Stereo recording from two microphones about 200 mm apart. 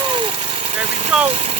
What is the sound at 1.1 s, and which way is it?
Engine, 5° right (ahead or behind).